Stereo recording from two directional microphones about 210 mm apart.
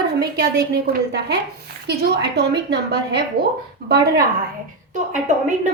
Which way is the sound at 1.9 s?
55° right (ahead or behind).